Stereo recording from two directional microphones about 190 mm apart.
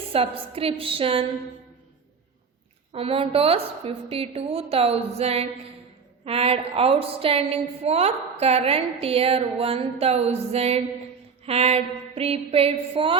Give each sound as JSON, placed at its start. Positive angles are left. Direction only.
{"t": 0.1, "sound": "a woman's voice", "side_deg": -30}
{"t": 2.9, "sound": "a woman's voice", "side_deg": -30}